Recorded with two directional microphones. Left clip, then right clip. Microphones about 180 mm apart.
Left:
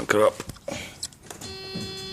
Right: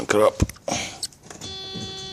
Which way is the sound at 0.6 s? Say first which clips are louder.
Right 6 dB; 35° right (ahead or behind).